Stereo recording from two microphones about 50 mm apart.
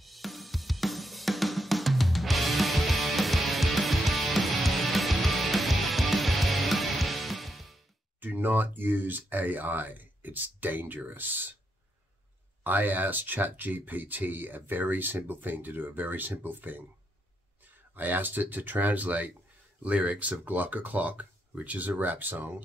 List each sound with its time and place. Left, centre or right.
0.0 s drum kit: centre
8.2 s speech: right
12.6 s speech: right
17.9 s speech: right